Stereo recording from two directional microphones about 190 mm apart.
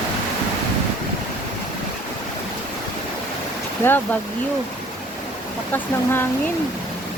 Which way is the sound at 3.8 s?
10° left (ahead or behind).